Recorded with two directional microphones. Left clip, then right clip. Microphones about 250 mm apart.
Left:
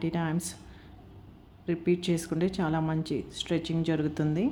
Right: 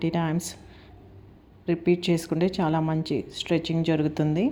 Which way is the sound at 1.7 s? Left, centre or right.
Centre.